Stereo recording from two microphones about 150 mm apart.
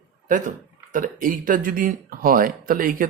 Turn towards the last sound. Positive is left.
turn(degrees=-70)  # may be behind; listen again after turning